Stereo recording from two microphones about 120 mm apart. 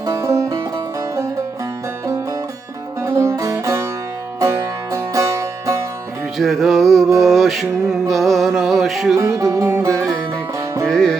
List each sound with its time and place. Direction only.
0.0 s music: 25° right (ahead or behind)
3.0 s music: 25° right (ahead or behind)
6.4 s music: centre (ahead or behind)
9.1 s music: 25° right (ahead or behind)
10.8 s music: 5° left (ahead or behind)